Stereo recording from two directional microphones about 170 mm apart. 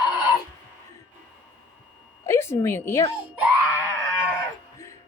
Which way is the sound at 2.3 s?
15° left (ahead or behind).